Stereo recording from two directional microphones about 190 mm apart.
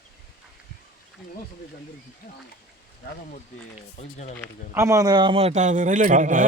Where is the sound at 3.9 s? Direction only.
35° left (ahead or behind).